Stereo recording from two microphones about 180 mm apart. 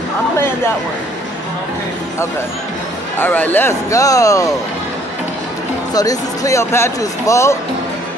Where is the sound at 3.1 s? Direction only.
10° left (ahead or behind).